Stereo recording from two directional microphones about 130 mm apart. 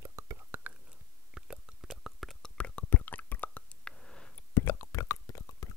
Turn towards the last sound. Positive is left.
turn(degrees=25)  # may be behind; listen again after turning